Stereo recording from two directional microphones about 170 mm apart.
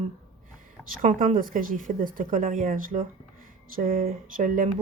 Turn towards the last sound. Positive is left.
turn(degrees=-50)  # may be behind; listen again after turning